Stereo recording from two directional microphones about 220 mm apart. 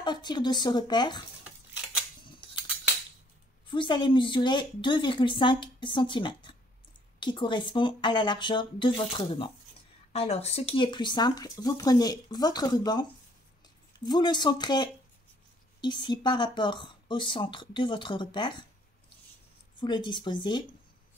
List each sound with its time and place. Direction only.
0.0 s speech: 20° left (ahead or behind)
3.6 s speech: 20° left (ahead or behind)
19.8 s speech: 20° left (ahead or behind)